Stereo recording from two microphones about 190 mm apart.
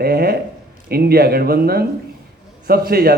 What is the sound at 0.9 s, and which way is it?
A man's voice, 55° right (ahead or behind).